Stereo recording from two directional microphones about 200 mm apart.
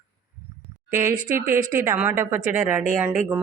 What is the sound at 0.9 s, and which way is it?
A woman's voice, 15° right (ahead or behind).